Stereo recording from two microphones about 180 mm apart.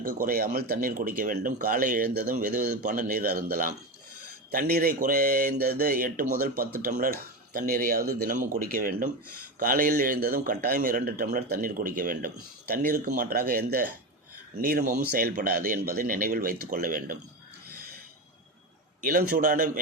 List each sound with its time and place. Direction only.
0.0 s a man's voice: 50° right (ahead or behind)
19.0 s a man's voice: 50° right (ahead or behind)